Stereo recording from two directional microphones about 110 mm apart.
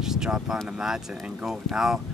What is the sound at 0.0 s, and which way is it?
Speech, 5° right (ahead or behind).